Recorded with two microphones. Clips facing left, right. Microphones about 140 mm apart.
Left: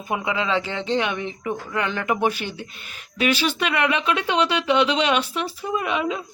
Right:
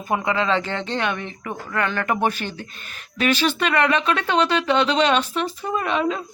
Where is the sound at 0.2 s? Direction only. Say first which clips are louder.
Right 2 dB; 10° left (ahead or behind).